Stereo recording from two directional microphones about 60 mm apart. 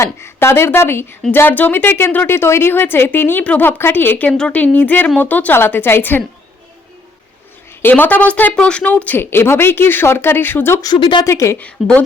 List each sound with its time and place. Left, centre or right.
0.0 s speech: left
4.3 s speech: centre
4.5 s speech: left
7.8 s speech: left
8.5 s speech: centre
8.9 s speech: left
9.3 s speech: left
10.8 s speech: left
11.3 s a woman's voice: left
11.6 s speech: left